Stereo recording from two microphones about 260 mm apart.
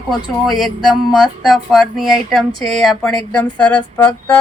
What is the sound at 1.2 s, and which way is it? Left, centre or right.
Speech, centre.